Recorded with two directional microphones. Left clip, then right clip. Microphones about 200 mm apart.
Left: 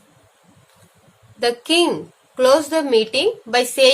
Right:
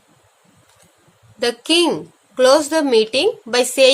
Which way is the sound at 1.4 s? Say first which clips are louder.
Right 1 dB; 35° right (ahead or behind).